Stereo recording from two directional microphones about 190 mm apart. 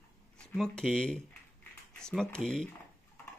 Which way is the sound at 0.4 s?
5° left (ahead or behind).